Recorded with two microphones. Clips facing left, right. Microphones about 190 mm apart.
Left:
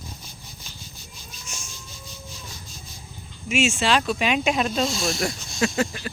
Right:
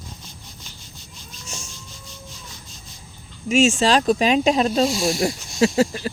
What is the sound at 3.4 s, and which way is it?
Speech, 40° right (ahead or behind).